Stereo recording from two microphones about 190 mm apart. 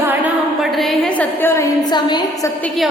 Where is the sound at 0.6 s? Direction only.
Centre (ahead or behind).